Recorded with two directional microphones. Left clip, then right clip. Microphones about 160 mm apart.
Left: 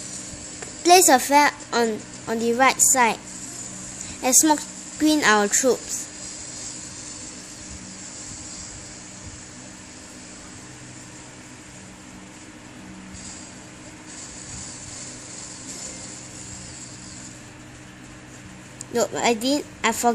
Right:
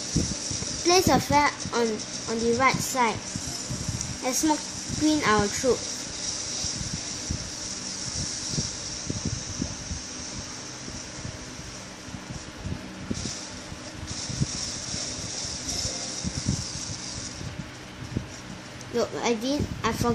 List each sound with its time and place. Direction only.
0.8 s a woman's voice: 65° left (ahead or behind)
4.2 s a woman's voice: 65° left (ahead or behind)
15.8 s a sound: 5° right (ahead or behind)
18.9 s a woman's voice: 60° left (ahead or behind)